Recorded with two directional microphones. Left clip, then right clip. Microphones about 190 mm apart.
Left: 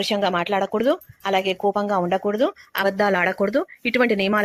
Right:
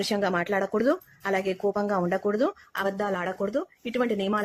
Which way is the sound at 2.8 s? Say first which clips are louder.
Left 9 dB; 20° left (ahead or behind).